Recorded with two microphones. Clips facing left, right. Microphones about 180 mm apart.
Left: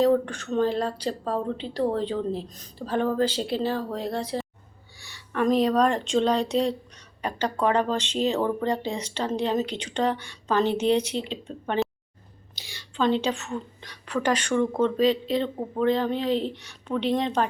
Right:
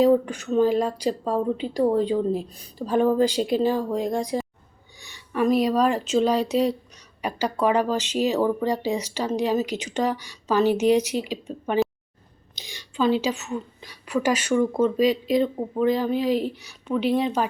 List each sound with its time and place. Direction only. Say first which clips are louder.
0.0 s a woman's voice: right 3 dB; 10° right (ahead or behind)
12.5 s a sound: right 3 dB; 15° right (ahead or behind)
13.0 s a woman's voice: right 2 dB; 5° right (ahead or behind)